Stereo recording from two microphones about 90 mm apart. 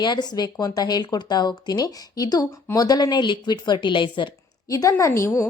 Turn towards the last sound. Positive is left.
turn(degrees=30)  # may be behind; listen again after turning